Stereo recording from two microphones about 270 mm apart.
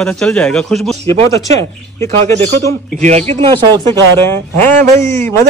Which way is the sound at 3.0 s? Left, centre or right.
Right.